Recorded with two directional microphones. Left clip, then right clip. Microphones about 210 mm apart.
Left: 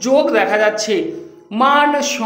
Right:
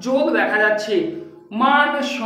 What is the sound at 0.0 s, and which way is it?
A woman's voice, 45° left (ahead or behind).